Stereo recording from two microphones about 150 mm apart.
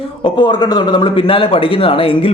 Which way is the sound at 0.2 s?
30° left (ahead or behind).